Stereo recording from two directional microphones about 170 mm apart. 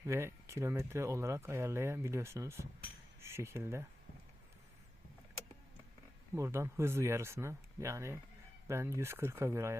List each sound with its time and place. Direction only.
0.0 s speech: 15° right (ahead or behind)
6.3 s speech: 15° right (ahead or behind)